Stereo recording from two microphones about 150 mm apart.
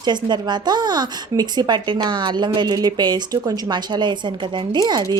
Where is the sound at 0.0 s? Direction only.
30° right (ahead or behind).